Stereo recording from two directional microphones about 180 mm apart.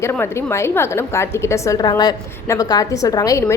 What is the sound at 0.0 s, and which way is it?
A woman's voice, 15° left (ahead or behind).